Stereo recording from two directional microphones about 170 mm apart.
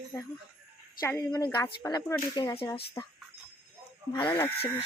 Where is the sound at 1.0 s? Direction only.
10° left (ahead or behind).